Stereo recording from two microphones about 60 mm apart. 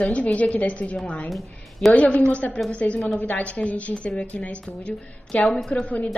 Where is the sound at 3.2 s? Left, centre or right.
Left.